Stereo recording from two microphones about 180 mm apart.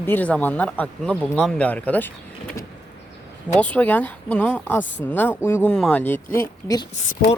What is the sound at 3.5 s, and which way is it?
Speech, 10° left (ahead or behind).